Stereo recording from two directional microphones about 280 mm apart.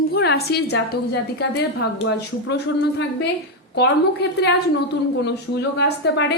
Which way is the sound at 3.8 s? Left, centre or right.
Left.